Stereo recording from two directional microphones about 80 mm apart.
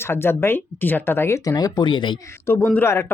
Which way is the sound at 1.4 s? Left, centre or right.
Left.